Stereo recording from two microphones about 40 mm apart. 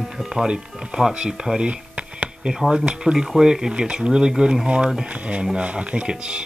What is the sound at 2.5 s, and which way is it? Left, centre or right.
Speech, centre.